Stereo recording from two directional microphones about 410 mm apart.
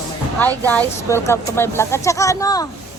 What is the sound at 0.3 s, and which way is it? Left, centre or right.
Speech, centre.